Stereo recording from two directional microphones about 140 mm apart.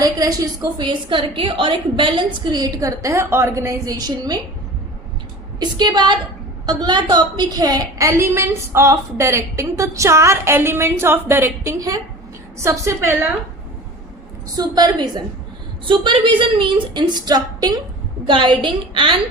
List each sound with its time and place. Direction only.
0.0 s a woman's voice: 25° right (ahead or behind)
5.5 s a woman's voice: 30° right (ahead or behind)
14.5 s a woman's voice: 30° right (ahead or behind)